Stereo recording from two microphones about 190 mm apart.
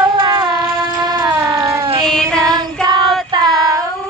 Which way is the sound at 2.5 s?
20° right (ahead or behind).